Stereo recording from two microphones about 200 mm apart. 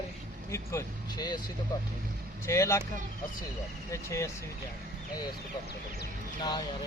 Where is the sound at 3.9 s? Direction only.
15° left (ahead or behind).